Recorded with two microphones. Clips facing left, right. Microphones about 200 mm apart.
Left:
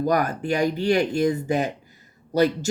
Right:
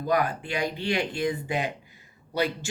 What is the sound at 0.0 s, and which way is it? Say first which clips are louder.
Speech: left 3 dB; 45° left (ahead or behind).